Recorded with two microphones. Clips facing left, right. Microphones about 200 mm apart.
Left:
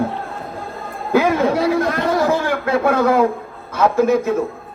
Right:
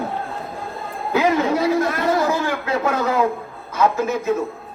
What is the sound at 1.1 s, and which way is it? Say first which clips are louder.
A man's voice: left 3 dB; 50° left (ahead or behind).